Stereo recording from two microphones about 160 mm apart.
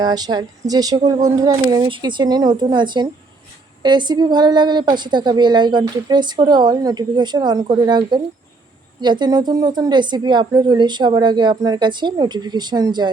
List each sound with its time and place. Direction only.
0.0 s a woman's voice: 25° right (ahead or behind)